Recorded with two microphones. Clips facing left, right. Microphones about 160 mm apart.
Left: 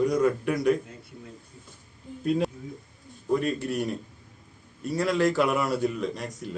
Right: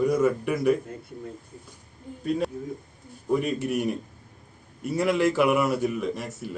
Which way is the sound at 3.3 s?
10° right (ahead or behind).